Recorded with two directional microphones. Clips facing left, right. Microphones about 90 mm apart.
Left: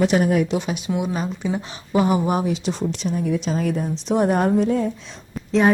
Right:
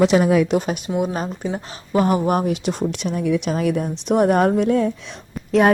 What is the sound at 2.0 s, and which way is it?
Speech, 50° right (ahead or behind).